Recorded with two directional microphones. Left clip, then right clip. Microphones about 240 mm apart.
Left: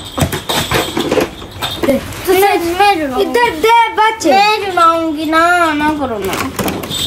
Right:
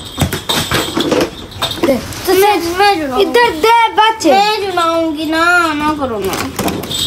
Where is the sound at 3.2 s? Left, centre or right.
Centre.